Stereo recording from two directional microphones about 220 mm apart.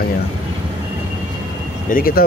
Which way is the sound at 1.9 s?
40° left (ahead or behind).